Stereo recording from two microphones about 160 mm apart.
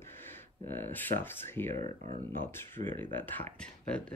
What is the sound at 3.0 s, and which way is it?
Speech, 10° left (ahead or behind).